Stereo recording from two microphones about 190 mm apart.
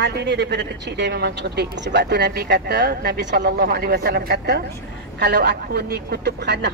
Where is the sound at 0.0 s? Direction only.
60° right (ahead or behind).